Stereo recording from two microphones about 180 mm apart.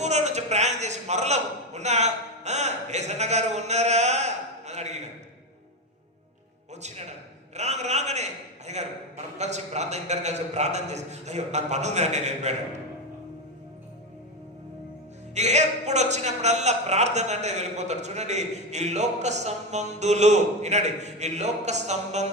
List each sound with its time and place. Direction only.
0.0 s a man's voice: 40° right (ahead or behind)
7.5 s a man's voice: 40° right (ahead or behind)
15.4 s a man's voice: 40° right (ahead or behind)